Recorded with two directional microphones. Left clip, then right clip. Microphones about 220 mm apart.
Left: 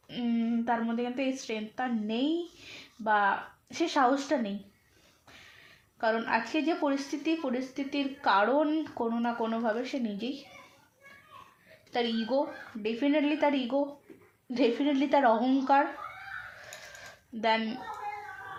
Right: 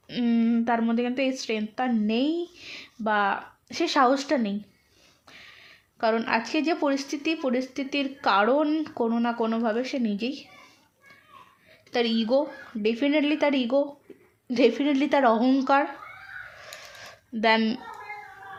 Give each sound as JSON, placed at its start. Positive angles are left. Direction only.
{"t": 0.1, "sound": "speech", "side_deg": -45}
{"t": 6.0, "sound": "speech", "side_deg": -45}
{"t": 11.9, "sound": "speech", "side_deg": -45}
{"t": 16.6, "sound": "a sound", "side_deg": -45}